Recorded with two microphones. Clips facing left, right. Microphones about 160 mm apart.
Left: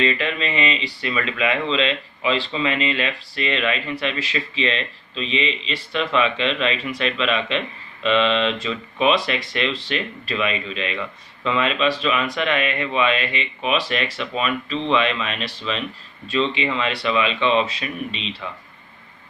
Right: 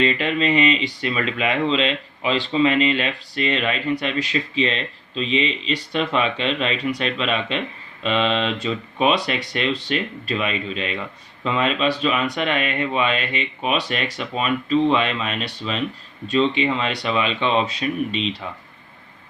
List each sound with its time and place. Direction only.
0.0 s speech: 35° right (ahead or behind)